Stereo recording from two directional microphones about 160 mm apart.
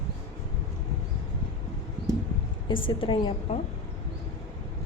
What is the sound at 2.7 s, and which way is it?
Speech, 30° left (ahead or behind).